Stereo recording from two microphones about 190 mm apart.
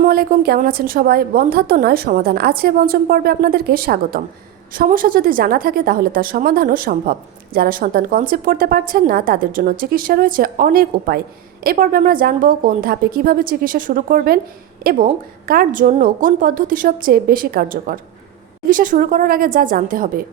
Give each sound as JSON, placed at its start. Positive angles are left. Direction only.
{"t": 0.0, "sound": "a woman's voice", "side_deg": -50}